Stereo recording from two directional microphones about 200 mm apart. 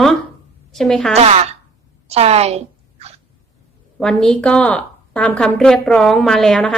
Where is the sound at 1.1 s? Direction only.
30° right (ahead or behind).